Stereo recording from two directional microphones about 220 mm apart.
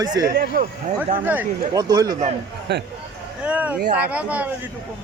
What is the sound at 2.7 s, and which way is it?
Speech, 50° right (ahead or behind).